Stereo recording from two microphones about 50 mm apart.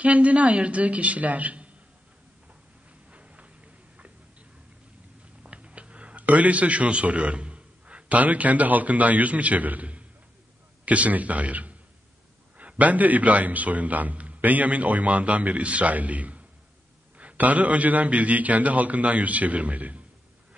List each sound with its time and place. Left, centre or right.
0.0 s a man's voice: right
3.1 s a sound: right
5.4 s a man's voice: right